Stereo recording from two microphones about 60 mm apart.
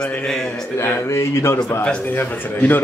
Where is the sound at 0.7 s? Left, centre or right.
Left.